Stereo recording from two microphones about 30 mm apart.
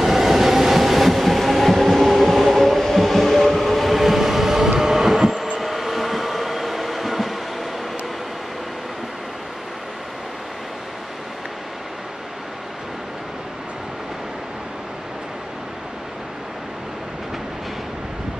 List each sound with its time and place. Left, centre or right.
0.0 s train: centre